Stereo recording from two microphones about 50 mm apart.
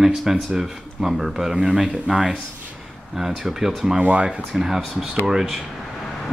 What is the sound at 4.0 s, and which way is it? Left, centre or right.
Speech, right.